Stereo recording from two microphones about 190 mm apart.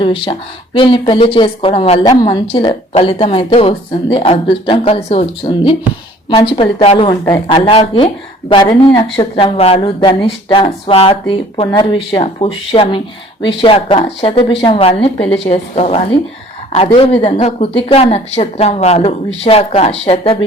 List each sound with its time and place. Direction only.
0.0 s a woman's voice: 25° left (ahead or behind)